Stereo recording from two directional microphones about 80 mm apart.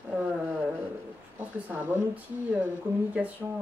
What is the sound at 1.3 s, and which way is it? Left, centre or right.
Speech, right.